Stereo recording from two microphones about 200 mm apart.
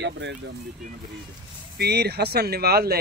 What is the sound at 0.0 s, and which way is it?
Speech, 65° right (ahead or behind).